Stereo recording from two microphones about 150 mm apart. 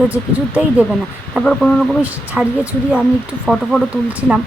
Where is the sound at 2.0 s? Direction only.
10° right (ahead or behind).